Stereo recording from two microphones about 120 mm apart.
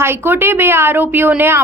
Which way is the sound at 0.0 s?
20° right (ahead or behind).